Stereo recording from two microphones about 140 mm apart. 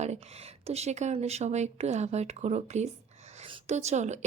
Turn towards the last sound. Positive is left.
turn(degrees=-55)  # may be behind; listen again after turning